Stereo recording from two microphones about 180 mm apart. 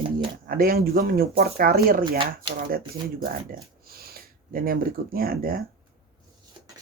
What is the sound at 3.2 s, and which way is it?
Speech, 55° right (ahead or behind).